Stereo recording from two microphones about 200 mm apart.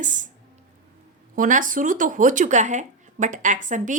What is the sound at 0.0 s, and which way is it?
Speech, 40° right (ahead or behind).